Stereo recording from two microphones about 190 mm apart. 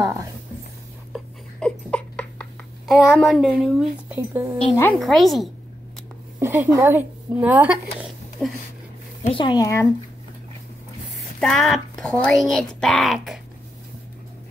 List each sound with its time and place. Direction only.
0.0 s a sound: 15° right (ahead or behind)
1.1 s a sound: 5° left (ahead or behind)
2.9 s speech: centre (ahead or behind)
4.3 s speech: 15° right (ahead or behind)
4.9 s speech: centre (ahead or behind)
6.4 s a woman's voice: 10° right (ahead or behind)
7.6 s a sound: 5° right (ahead or behind)
9.2 s speech: 25° left (ahead or behind)
11.3 s speech: 5° left (ahead or behind)